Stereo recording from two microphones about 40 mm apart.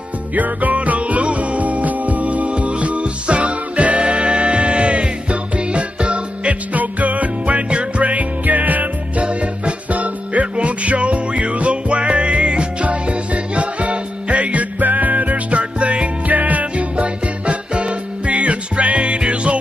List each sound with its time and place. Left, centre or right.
0.3 s music: right
9.2 s music: right
16.3 s music: right